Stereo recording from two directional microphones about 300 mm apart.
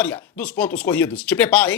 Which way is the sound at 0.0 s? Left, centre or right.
Centre.